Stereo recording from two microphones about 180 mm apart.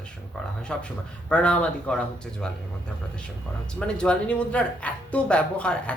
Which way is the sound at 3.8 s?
5° left (ahead or behind).